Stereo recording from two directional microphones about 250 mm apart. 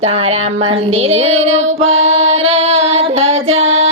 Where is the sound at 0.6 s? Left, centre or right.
Right.